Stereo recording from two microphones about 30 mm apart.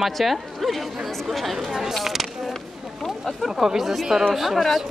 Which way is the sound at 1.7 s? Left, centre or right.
Centre.